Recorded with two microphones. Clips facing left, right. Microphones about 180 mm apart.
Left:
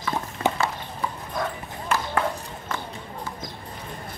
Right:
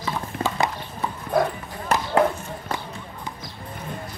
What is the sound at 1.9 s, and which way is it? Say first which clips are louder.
Basketball bounce: right 2 dB; 40° right (ahead or behind).